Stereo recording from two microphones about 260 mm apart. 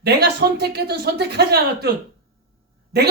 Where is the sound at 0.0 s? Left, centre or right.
Right.